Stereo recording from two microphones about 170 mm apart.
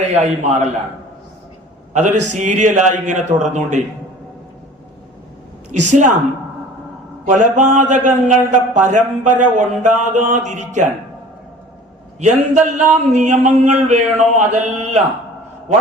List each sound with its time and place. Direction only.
0.0 s a man's voice: 40° right (ahead or behind)
1.9 s a man's voice: 45° right (ahead or behind)
5.9 s a man's voice: 45° right (ahead or behind)
7.3 s a man's voice: 45° right (ahead or behind)
12.2 s a man's voice: 45° right (ahead or behind)